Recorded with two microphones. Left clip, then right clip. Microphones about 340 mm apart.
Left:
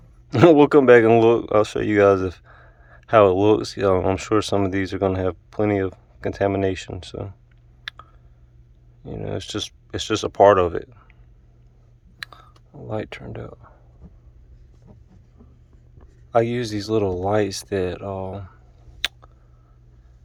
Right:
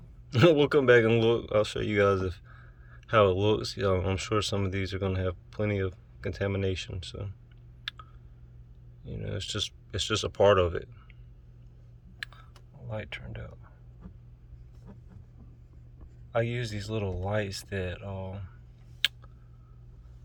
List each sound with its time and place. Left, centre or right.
0.3 s speech: centre
7.9 s a sound: centre
9.0 s speech: centre
12.2 s a sound: centre
12.9 s speech: centre
16.3 s speech: centre
19.0 s tick: centre